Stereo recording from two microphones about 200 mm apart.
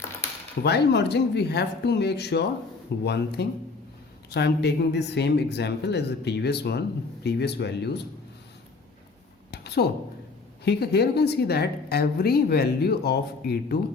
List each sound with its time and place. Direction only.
0.6 s speech: 55° left (ahead or behind)
9.5 s a sound: 55° left (ahead or behind)
10.6 s a woman's voice: 55° left (ahead or behind)